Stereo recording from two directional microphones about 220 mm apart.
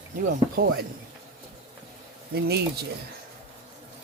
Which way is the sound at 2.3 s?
45° right (ahead or behind).